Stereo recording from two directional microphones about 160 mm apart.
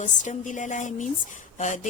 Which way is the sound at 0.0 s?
50° left (ahead or behind).